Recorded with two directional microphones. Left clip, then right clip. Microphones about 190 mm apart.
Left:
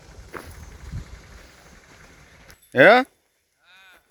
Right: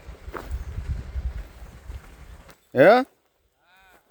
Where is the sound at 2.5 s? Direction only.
Centre (ahead or behind).